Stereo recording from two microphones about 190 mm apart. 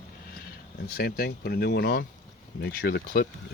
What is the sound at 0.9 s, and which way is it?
Speech, 55° left (ahead or behind).